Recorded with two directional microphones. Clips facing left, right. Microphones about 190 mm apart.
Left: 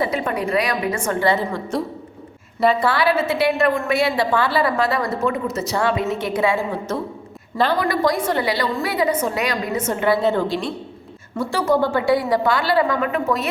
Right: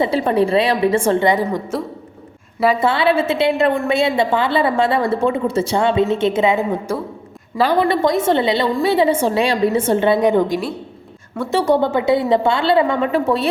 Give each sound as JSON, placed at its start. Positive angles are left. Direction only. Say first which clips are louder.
{"t": 0.0, "sound": "a woman's voice", "louder": "right 6 dB", "side_deg": -30}
{"t": 1.3, "sound": "a woman's voice", "louder": "right 3 dB", "side_deg": -15}
{"t": 2.8, "sound": "a woman's voice", "louder": "right 3 dB", "side_deg": -25}
{"t": 10.2, "sound": "a woman's voice", "louder": "right 4 dB", "side_deg": -15}
{"t": 11.5, "sound": "a woman's voice", "louder": "right 3 dB", "side_deg": -25}